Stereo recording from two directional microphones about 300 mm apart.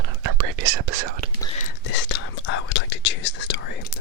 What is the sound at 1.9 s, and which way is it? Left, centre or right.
Whispering, left.